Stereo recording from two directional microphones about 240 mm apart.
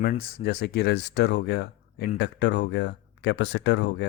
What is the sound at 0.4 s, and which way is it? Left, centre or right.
Speech, left.